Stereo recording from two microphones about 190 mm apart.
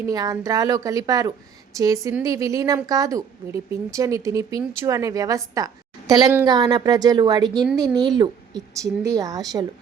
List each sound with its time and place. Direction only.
0.0 s a woman's voice: 20° right (ahead or behind)